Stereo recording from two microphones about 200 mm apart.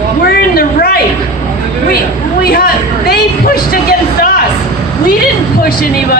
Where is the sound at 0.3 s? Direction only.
50° left (ahead or behind).